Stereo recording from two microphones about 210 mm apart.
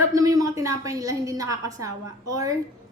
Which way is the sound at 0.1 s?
15° right (ahead or behind).